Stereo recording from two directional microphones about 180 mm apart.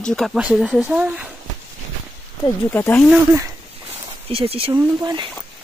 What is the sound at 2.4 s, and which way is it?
Speech, 10° left (ahead or behind).